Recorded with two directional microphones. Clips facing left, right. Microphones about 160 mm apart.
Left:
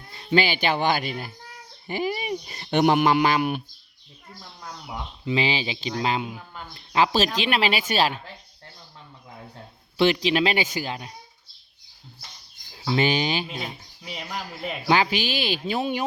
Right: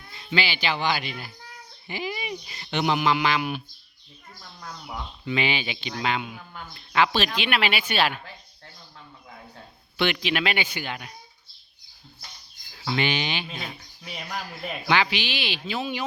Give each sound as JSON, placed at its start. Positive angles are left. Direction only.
{"t": 0.0, "sound": "speech", "side_deg": 35}
{"t": 4.4, "sound": "speech", "side_deg": 20}
{"t": 5.3, "sound": "speech", "side_deg": 30}
{"t": 10.0, "sound": "speech", "side_deg": 35}
{"t": 12.7, "sound": "speech", "side_deg": 35}
{"t": 14.0, "sound": "speech", "side_deg": 5}
{"t": 14.8, "sound": "speech", "side_deg": 40}